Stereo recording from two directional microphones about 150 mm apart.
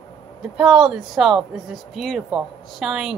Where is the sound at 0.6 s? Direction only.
5° right (ahead or behind).